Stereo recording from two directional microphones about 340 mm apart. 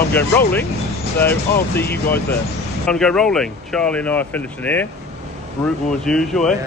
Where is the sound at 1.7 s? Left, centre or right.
Centre.